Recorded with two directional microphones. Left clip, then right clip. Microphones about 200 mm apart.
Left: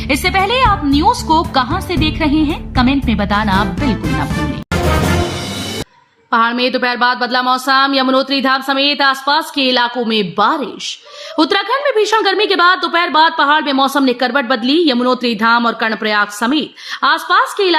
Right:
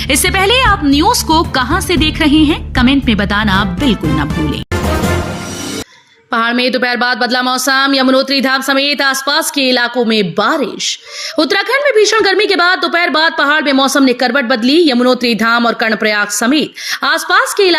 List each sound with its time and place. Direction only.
0.1 s speech: 10° right (ahead or behind)
6.3 s speech: 15° right (ahead or behind)